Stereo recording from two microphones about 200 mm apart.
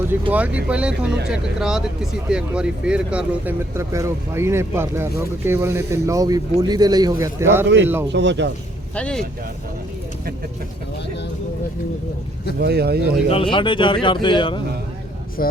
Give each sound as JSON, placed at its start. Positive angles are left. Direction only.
{"t": 0.1, "sound": "speech", "side_deg": -10}
{"t": 8.1, "sound": "speech", "side_deg": -60}
{"t": 9.0, "sound": "speech", "side_deg": 5}
{"t": 12.5, "sound": "speech", "side_deg": -55}
{"t": 13.3, "sound": "speech", "side_deg": 25}
{"t": 15.4, "sound": "speech", "side_deg": 45}